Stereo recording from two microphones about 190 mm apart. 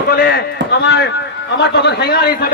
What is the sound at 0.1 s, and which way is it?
A man's voice, 50° left (ahead or behind).